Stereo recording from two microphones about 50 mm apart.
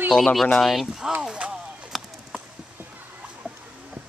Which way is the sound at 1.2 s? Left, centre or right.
Right.